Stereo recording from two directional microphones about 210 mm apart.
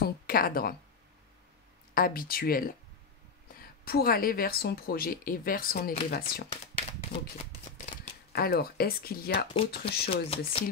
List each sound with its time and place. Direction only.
0.0 s speech: 45° left (ahead or behind)
2.0 s speech: 45° left (ahead or behind)
6.5 s a sound: 25° left (ahead or behind)
8.3 s speech: 50° left (ahead or behind)
10.1 s speech: 25° left (ahead or behind)